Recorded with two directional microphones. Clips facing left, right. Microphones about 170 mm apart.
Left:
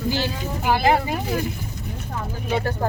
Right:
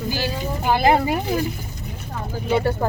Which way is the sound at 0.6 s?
20° right (ahead or behind).